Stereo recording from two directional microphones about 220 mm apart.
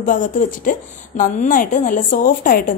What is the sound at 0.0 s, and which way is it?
A woman's voice, 35° left (ahead or behind).